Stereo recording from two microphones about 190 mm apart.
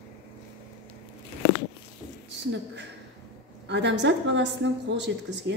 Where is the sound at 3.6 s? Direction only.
65° right (ahead or behind).